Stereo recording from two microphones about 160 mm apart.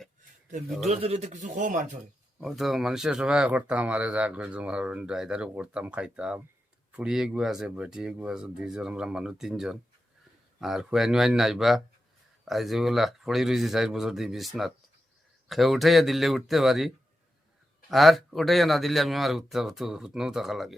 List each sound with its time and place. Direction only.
0.9 s a man's voice: 40° right (ahead or behind)
2.4 s a man's voice: centre (ahead or behind)
17.9 s a man's voice: centre (ahead or behind)